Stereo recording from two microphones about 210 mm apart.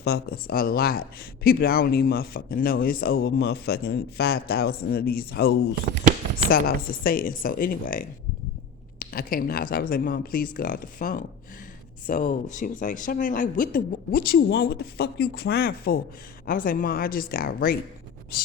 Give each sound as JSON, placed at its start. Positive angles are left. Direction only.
{"t": 0.0, "sound": "a man's voice", "side_deg": 50}